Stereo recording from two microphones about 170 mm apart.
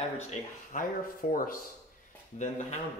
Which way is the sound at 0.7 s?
50° left (ahead or behind).